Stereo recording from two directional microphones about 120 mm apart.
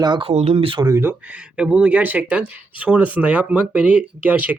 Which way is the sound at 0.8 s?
25° right (ahead or behind).